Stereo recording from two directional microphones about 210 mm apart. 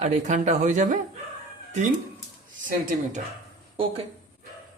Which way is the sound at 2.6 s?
40° right (ahead or behind).